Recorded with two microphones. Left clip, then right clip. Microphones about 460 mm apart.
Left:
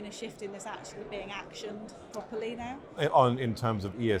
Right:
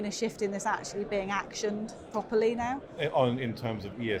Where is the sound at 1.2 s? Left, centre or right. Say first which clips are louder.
Right 8 dB; right.